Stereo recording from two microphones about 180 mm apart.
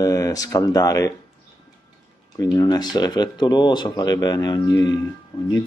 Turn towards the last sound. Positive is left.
turn(degrees=20)  # may be behind; listen again after turning